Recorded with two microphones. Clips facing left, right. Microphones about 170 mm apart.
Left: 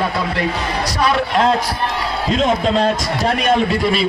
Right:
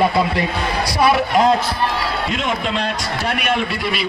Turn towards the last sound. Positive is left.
turn(degrees=30)  # may be behind; listen again after turning